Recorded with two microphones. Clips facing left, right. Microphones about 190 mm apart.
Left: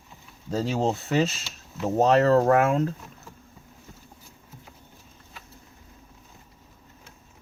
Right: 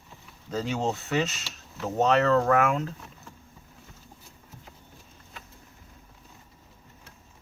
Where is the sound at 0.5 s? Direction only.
35° left (ahead or behind).